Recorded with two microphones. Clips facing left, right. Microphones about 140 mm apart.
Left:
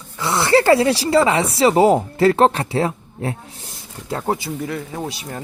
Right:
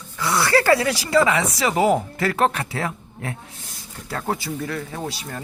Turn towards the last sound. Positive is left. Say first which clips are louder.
# left 2 dB
turn(degrees=15)  # may be behind; listen again after turning